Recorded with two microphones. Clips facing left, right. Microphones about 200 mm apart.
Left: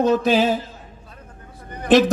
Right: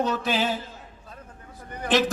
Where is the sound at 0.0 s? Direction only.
40° left (ahead or behind).